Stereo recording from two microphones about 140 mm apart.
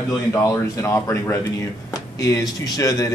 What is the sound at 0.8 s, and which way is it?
Speech, 20° left (ahead or behind).